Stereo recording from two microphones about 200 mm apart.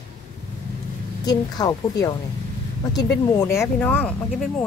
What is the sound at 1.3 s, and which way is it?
Speech, 20° left (ahead or behind).